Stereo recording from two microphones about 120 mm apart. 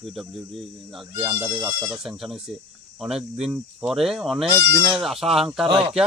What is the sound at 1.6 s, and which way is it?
Speech, 25° right (ahead or behind).